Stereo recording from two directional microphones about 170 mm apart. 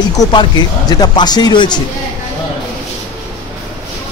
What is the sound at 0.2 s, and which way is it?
Speech, 25° left (ahead or behind).